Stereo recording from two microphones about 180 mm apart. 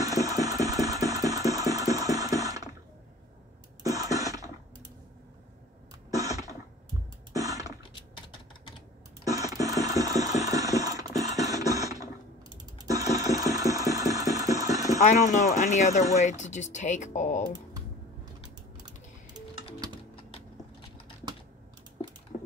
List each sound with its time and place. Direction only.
0.0 s engine: 20° right (ahead or behind)
3.8 s a sound: 20° right (ahead or behind)
6.9 s music: 20° right (ahead or behind)
9.2 s a sound: 20° right (ahead or behind)
12.7 s engine: 20° right (ahead or behind)
15.0 s speech: 45° left (ahead or behind)